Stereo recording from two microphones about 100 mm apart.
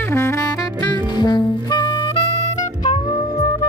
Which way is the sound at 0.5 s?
45° left (ahead or behind).